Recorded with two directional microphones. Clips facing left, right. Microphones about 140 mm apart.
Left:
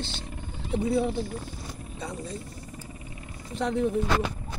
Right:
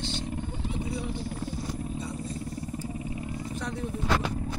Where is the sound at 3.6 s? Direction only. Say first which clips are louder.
Left 11 dB; 60° left (ahead or behind).